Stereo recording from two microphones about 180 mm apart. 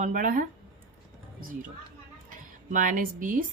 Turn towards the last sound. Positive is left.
turn(degrees=-45)  # may be behind; listen again after turning